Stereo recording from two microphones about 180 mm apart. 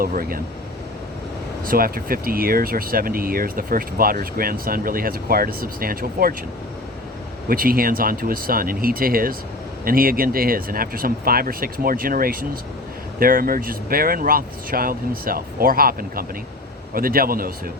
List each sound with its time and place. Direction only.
0.0 s speech: 55° right (ahead or behind)
1.6 s speech: 55° right (ahead or behind)
7.4 s speech: 55° right (ahead or behind)